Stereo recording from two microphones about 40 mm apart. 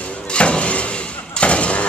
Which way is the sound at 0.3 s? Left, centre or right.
Left.